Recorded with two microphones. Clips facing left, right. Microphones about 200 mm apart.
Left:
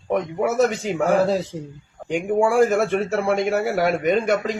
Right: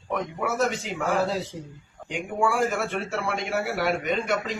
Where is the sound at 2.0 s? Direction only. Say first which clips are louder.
Left 7 dB; 45° left (ahead or behind).